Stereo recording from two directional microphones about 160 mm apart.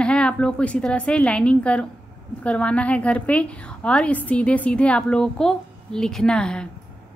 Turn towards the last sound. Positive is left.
turn(degrees=5)  # may be behind; listen again after turning